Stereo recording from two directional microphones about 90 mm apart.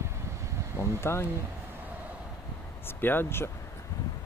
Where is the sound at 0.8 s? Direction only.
30° left (ahead or behind).